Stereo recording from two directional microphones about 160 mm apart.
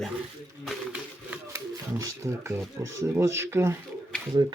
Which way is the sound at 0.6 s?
5° right (ahead or behind).